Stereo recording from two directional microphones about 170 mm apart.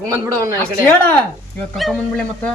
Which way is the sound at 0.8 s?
10° left (ahead or behind).